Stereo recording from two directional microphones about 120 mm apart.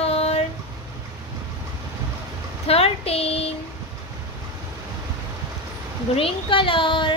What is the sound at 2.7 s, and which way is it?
Speech, 55° left (ahead or behind).